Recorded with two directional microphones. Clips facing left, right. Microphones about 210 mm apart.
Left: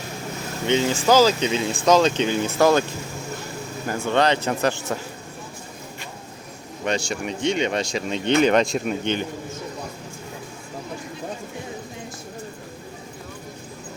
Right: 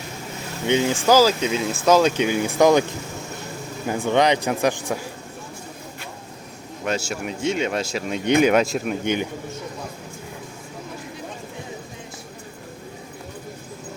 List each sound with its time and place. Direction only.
0.7 s speech: 10° right (ahead or behind)
3.8 s speech: 15° right (ahead or behind)
6.8 s speech: 5° right (ahead or behind)